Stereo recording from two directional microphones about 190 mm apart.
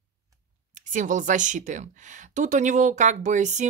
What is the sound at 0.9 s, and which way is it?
Speech, 40° right (ahead or behind).